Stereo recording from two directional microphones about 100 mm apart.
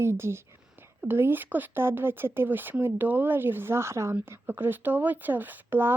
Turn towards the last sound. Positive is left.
turn(degrees=-20)  # may be behind; listen again after turning